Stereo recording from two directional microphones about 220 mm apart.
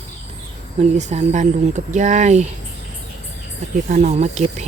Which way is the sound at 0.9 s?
30° right (ahead or behind).